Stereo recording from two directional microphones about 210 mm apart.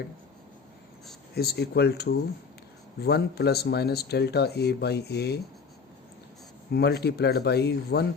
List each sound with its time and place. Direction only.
1.4 s speech: 50° left (ahead or behind)
6.7 s speech: 50° left (ahead or behind)